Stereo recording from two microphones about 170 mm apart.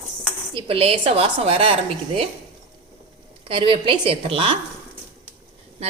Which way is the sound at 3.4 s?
30° right (ahead or behind).